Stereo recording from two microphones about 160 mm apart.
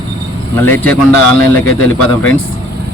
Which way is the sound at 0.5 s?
15° left (ahead or behind).